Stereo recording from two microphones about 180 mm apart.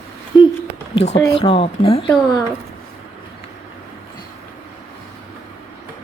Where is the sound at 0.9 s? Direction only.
35° left (ahead or behind).